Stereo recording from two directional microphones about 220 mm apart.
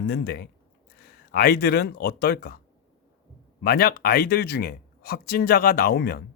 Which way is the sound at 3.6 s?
45° left (ahead or behind).